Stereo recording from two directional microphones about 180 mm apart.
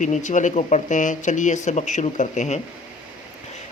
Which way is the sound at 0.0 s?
45° left (ahead or behind).